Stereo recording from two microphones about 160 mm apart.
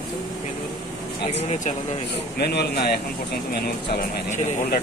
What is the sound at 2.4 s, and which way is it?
Speech, 90° left.